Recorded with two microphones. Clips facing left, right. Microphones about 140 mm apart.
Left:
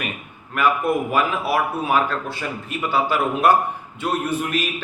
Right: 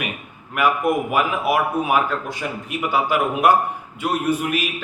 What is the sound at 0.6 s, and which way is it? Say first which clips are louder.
A man's voice: right 1 dB; 10° right (ahead or behind).